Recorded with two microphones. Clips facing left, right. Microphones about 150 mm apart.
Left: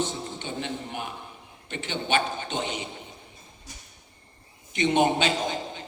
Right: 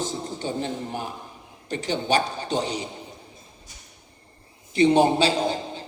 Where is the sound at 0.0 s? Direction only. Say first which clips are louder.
Right 2 dB; 40° right (ahead or behind).